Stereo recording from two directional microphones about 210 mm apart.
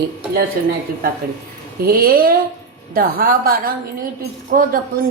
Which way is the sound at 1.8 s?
45° right (ahead or behind).